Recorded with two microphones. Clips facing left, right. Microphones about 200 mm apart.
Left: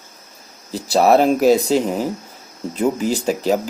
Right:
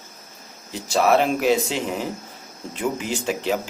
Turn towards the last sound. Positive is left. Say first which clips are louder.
# left 6 dB
turn(degrees=40)  # may be behind; listen again after turning